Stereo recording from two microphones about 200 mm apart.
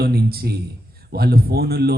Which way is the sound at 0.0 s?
50° right (ahead or behind).